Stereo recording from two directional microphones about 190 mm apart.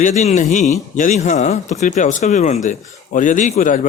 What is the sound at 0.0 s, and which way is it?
A man's voice, 40° left (ahead or behind).